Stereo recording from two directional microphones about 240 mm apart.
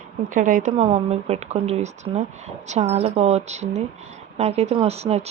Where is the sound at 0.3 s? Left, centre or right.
Right.